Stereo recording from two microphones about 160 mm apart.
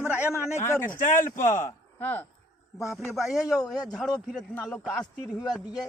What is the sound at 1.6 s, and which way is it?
Speech, 10° left (ahead or behind).